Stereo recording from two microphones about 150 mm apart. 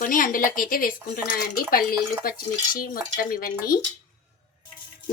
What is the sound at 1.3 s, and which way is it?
A woman's voice, 80° left.